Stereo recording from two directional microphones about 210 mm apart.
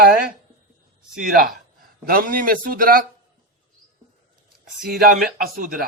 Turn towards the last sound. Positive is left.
turn(degrees=-40)  # may be behind; listen again after turning